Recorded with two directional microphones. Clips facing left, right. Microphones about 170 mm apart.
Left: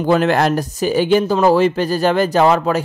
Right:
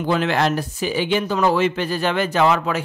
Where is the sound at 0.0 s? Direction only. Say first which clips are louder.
Left 5 dB; 45° left (ahead or behind).